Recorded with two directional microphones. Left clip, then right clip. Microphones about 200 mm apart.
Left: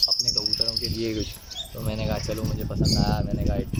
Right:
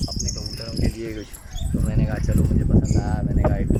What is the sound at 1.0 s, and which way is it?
Speech, 10° left (ahead or behind).